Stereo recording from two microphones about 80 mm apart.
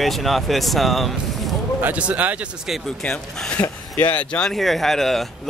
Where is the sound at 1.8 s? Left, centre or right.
Centre.